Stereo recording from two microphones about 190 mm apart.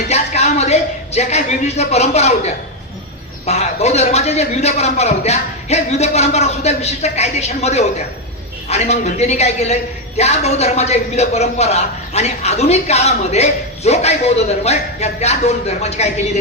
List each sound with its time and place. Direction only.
0.1 s a man's voice: 35° left (ahead or behind)